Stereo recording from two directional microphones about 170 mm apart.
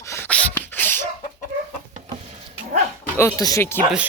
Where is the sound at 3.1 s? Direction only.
15° left (ahead or behind).